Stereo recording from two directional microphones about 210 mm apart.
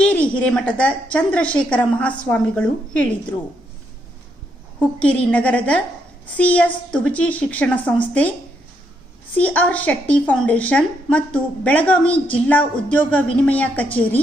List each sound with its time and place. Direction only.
0.0 s a woman's voice: 5° left (ahead or behind)
4.9 s a woman's voice: 5° left (ahead or behind)
9.4 s a woman's voice: 5° left (ahead or behind)